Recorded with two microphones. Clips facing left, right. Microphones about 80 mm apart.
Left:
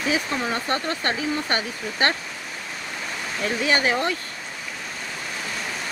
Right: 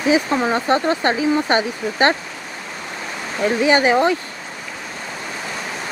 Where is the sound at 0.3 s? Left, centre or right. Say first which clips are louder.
Right 7 dB; right.